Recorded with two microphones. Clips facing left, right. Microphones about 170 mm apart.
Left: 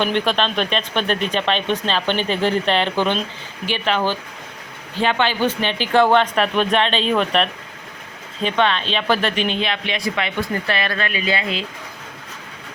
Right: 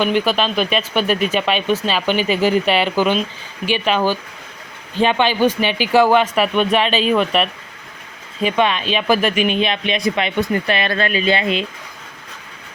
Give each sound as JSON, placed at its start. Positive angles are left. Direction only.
{"t": 0.0, "sound": "speech", "side_deg": -5}
{"t": 10.9, "sound": "speech", "side_deg": -35}